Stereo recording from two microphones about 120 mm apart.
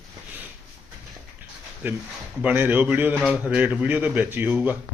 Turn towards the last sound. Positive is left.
turn(degrees=-15)  # may be behind; listen again after turning